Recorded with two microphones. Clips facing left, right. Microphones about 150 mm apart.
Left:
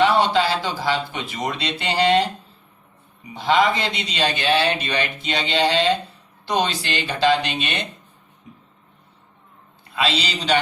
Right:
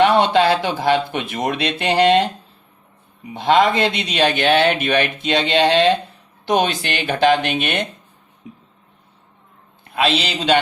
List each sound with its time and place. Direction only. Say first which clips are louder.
0.0 s a sound: right 3 dB; 55° right (ahead or behind)
0.3 s speech: right 5 dB; 60° right (ahead or behind)
3.3 s speech: right 4 dB; 55° right (ahead or behind)
9.8 s a man's voice: right 4 dB; 55° right (ahead or behind)